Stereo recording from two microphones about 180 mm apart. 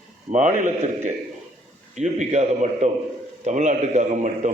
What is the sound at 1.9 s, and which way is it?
A man's voice, 40° right (ahead or behind).